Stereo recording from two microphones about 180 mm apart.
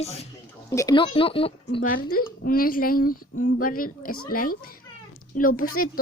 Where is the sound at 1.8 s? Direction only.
50° left (ahead or behind).